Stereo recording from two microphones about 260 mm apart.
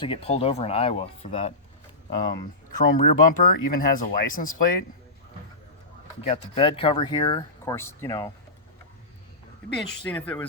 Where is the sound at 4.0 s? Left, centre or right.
Left.